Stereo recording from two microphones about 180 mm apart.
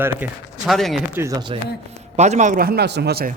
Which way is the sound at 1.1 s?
20° right (ahead or behind).